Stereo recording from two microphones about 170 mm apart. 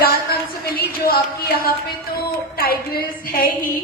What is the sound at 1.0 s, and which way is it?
A woman's voice, 60° left (ahead or behind).